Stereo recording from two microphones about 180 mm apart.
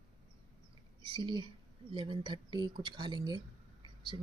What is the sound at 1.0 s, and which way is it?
Speech, 25° right (ahead or behind).